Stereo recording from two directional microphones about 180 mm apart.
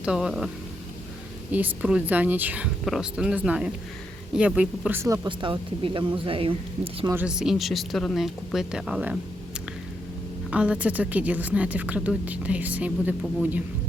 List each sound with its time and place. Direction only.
0.0 s speech: 5° right (ahead or behind)
1.5 s a woman's voice: 10° right (ahead or behind); by 7.1 s 30° right (ahead or behind)
7.1 s speech: 10° right (ahead or behind)
10.5 s a woman's voice: 5° right (ahead or behind)